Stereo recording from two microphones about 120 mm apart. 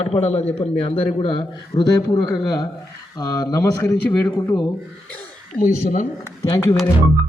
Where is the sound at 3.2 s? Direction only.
30° left (ahead or behind).